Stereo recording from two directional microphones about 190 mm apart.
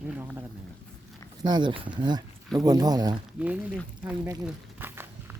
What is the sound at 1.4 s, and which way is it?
Speech, 25° right (ahead or behind).